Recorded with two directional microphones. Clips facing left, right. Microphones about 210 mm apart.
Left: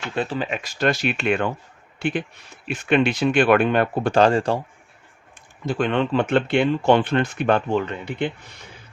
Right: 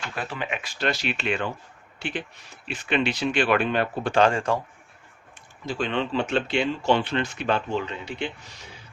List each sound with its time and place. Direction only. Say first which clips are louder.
0.2 s speech: left 7 dB; 30° left (ahead or behind)
5.6 s speech: left 5 dB; 55° left (ahead or behind)